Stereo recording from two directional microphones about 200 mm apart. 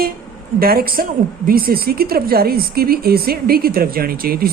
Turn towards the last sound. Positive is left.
turn(degrees=-50)  # may be behind; listen again after turning